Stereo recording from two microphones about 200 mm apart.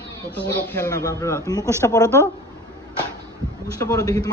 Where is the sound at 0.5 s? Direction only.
10° left (ahead or behind).